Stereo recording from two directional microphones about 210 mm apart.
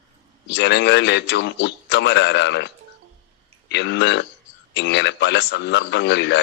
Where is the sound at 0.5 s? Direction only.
55° left (ahead or behind).